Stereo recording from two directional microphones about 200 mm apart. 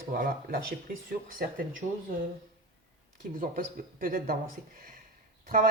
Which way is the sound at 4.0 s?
45° right (ahead or behind).